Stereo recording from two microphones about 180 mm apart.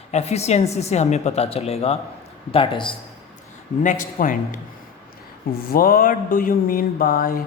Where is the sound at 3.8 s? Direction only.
45° left (ahead or behind).